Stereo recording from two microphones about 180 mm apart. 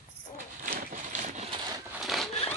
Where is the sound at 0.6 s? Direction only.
50° right (ahead or behind); by 1.6 s 35° right (ahead or behind).